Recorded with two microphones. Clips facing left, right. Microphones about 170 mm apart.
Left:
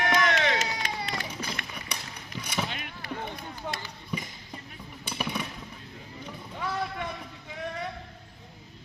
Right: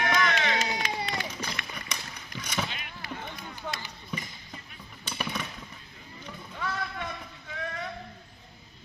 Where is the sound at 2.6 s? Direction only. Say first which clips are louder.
Left 3 dB; 45° left (ahead or behind).